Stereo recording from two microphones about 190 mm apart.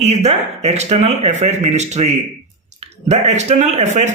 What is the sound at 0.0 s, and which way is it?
Speech, 35° right (ahead or behind).